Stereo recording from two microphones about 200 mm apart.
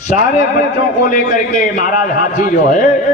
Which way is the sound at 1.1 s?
40° left (ahead or behind).